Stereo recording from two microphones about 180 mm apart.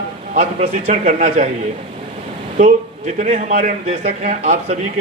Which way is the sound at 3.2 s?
40° right (ahead or behind).